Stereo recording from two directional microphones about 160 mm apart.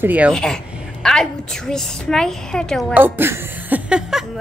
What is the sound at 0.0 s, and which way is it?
Speech, 10° right (ahead or behind).